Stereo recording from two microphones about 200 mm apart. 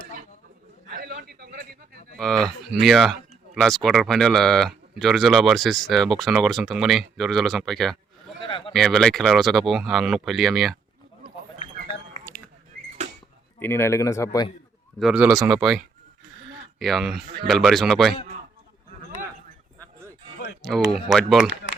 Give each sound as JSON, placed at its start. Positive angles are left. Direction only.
{"t": 0.9, "sound": "a sound", "side_deg": -50}
{"t": 2.1, "sound": "speech", "side_deg": 5}
{"t": 8.4, "sound": "a sound", "side_deg": 25}
{"t": 8.7, "sound": "speech", "side_deg": 0}
{"t": 13.6, "sound": "speech", "side_deg": 10}
{"t": 14.9, "sound": "speech", "side_deg": -5}
{"t": 20.6, "sound": "speech", "side_deg": 0}